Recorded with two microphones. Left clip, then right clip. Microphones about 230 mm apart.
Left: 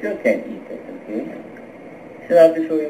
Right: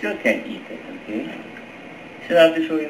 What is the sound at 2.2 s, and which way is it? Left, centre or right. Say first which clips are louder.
Speech: left 3 dB; centre.